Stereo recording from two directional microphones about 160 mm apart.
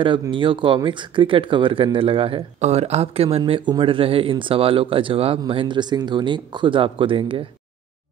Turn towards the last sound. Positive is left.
turn(degrees=-35)  # may be behind; listen again after turning